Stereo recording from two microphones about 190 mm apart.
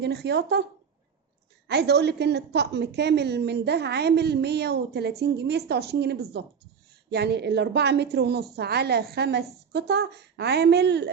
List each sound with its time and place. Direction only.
0.0 s a woman's voice: 60° right (ahead or behind)
1.6 s a woman's voice: 60° right (ahead or behind)